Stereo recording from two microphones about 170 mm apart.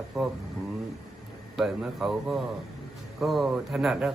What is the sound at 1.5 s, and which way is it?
A man's voice, centre (ahead or behind).